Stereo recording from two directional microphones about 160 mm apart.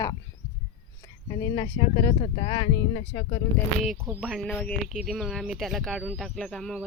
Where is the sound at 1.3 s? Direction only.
30° left (ahead or behind).